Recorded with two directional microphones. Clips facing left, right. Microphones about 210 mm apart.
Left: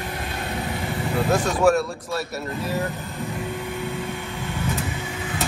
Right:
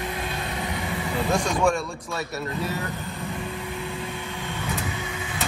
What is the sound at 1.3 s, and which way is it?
Speech, 5° left (ahead or behind).